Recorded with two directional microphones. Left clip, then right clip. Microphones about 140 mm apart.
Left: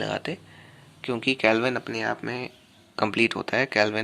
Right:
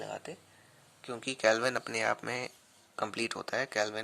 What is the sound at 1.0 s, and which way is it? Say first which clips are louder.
Speech: left 12 dB; 25° right (ahead or behind).